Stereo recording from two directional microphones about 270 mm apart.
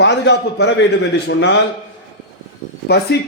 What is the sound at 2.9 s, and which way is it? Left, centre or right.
Speech, left.